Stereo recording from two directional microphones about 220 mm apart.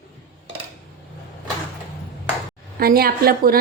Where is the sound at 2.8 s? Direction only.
45° right (ahead or behind).